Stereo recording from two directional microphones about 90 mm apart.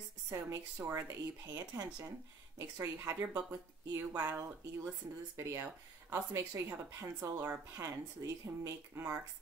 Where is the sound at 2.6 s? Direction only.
30° right (ahead or behind).